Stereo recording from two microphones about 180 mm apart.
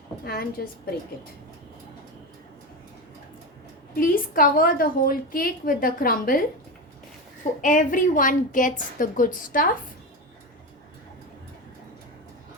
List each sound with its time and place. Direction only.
0.3 s a woman's voice: 55° left (ahead or behind)
3.9 s a woman's voice: 55° left (ahead or behind)
7.6 s a woman's voice: 45° left (ahead or behind)